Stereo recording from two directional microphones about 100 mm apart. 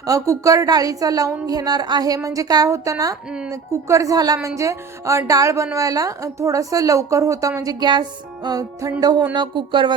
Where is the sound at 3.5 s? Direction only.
35° right (ahead or behind).